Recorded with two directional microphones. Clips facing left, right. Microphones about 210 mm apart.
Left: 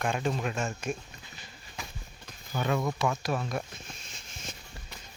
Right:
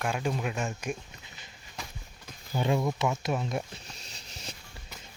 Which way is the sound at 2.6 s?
25° right (ahead or behind).